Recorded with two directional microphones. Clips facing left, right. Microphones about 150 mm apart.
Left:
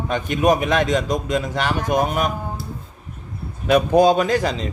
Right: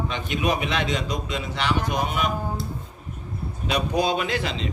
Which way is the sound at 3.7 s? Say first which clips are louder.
Left 9 dB; 45° left (ahead or behind).